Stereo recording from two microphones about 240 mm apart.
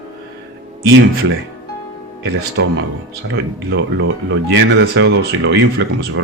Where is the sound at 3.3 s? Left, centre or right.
Right.